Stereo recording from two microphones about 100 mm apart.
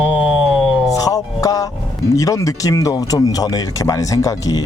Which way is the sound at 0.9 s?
35° left (ahead or behind).